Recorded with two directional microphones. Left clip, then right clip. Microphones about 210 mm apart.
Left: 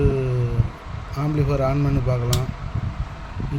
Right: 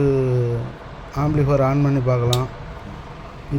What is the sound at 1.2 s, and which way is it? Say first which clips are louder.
Speech: right 4 dB; 5° right (ahead or behind).